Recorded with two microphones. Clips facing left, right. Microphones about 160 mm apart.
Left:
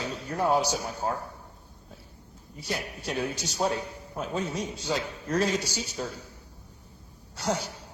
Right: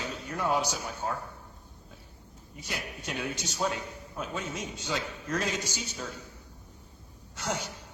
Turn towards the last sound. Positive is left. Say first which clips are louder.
# left 4 dB
turn(degrees=35)  # may be behind; listen again after turning